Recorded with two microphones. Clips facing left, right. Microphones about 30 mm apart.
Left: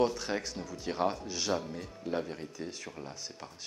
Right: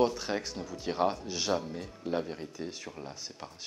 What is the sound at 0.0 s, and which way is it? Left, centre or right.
Speech, centre.